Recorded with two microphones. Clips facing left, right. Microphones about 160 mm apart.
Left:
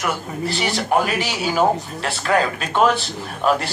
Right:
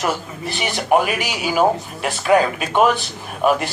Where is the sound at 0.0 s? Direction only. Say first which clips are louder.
Right 1 dB; 20° right (ahead or behind).